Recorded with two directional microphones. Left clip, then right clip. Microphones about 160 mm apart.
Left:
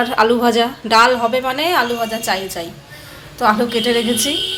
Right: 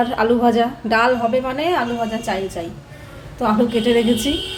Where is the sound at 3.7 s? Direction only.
15° right (ahead or behind).